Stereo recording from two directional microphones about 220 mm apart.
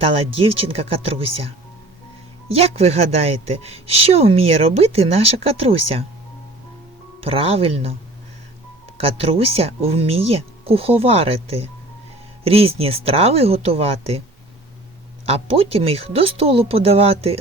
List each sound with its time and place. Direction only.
0.0 s speech: 25° right (ahead or behind)
7.3 s speech: 25° right (ahead or behind)
9.0 s speech: 25° right (ahead or behind)
15.3 s speech: 25° right (ahead or behind)